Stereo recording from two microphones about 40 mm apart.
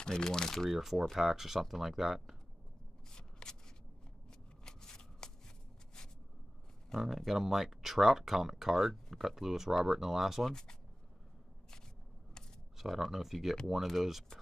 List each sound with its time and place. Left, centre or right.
0.0 s speech: centre
0.7 s speech: centre
3.1 s shuffling cards: centre
4.6 s shuffling cards: centre
7.0 s speech: centre
10.4 s speech: centre
12.7 s speech: centre